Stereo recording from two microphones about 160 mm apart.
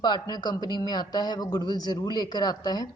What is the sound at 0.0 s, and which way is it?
Speech, 25° left (ahead or behind).